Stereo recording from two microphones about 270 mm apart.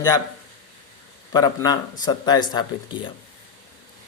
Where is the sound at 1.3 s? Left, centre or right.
Centre.